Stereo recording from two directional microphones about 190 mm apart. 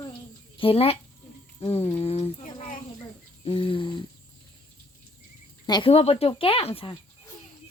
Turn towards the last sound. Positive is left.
turn(degrees=30)  # may be behind; listen again after turning